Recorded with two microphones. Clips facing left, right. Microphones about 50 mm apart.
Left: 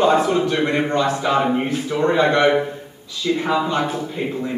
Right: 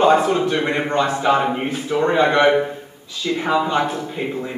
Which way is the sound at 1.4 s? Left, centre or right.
Centre.